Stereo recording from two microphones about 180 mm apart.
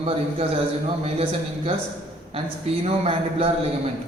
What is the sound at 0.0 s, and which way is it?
Speech, 30° right (ahead or behind).